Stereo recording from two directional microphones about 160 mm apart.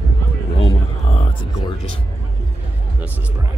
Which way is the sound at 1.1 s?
35° left (ahead or behind).